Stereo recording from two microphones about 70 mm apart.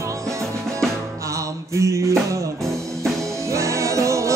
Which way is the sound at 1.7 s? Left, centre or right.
Right.